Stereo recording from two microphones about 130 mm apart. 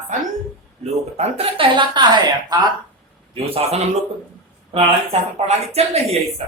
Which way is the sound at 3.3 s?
50° right (ahead or behind).